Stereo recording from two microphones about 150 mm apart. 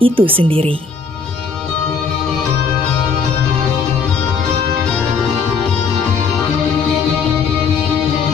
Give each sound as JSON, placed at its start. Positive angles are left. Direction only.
{"t": 0.0, "sound": "speech", "side_deg": -35}